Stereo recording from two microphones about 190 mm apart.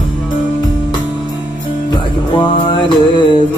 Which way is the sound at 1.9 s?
25° left (ahead or behind).